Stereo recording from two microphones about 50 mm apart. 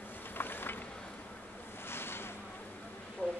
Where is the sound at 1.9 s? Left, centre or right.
Left.